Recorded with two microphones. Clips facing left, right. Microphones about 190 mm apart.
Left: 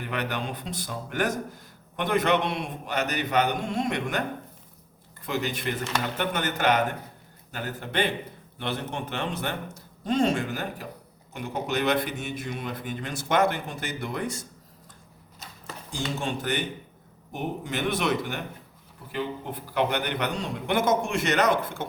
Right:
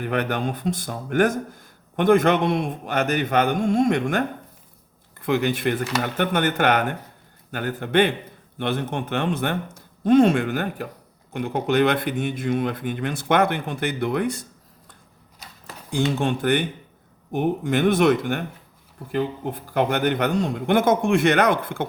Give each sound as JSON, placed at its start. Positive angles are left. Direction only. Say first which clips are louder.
{"t": 0.0, "sound": "speech", "louder": "right 7 dB", "side_deg": -50}
{"t": 5.2, "sound": "speech", "louder": "right 8 dB", "side_deg": -55}
{"t": 15.9, "sound": "speech", "louder": "right 8 dB", "side_deg": -60}